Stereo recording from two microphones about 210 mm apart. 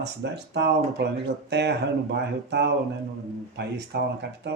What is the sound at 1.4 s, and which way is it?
Speech, 50° right (ahead or behind).